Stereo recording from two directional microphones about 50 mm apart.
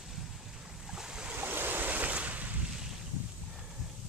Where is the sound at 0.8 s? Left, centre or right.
Centre.